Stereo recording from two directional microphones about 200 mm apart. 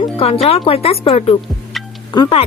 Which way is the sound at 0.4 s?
30° left (ahead or behind).